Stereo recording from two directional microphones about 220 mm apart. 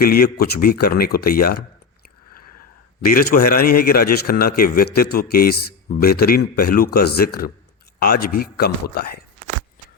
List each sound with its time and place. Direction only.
0.0 s a man's voice: 45° left (ahead or behind)
3.0 s a man's voice: 40° left (ahead or behind)